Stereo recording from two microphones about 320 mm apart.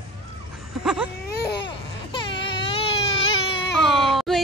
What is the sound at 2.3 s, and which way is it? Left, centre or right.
Baby cry, centre.